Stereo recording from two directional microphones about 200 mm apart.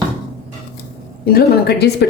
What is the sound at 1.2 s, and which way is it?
Speech, 50° left (ahead or behind).